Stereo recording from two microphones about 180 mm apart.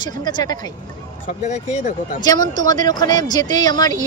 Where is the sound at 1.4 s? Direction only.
40° left (ahead or behind).